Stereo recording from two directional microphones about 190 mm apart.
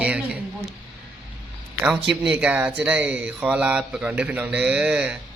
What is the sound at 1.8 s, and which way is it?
Speech, 5° right (ahead or behind).